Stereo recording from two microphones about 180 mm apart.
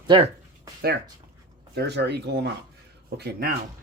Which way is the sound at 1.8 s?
65° right (ahead or behind).